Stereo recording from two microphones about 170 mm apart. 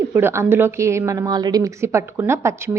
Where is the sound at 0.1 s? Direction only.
15° right (ahead or behind).